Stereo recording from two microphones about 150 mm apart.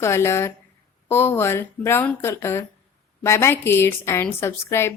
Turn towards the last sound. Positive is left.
turn(degrees=15)  # may be behind; listen again after turning